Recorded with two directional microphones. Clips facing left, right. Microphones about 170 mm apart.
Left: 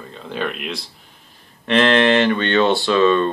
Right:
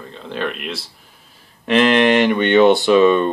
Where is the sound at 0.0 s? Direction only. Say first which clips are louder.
Right 1 dB; centre (ahead or behind).